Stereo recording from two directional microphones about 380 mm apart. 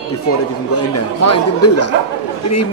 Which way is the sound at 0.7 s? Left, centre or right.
Left.